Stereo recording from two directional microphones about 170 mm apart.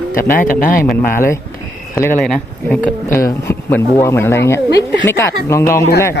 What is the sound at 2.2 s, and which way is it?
Speech, 5° left (ahead or behind).